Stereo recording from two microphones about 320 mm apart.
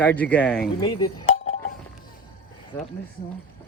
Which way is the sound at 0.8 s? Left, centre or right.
Centre.